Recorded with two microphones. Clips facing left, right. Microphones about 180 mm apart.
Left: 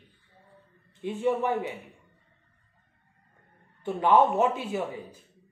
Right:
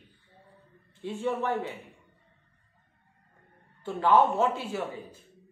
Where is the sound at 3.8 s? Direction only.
20° left (ahead or behind).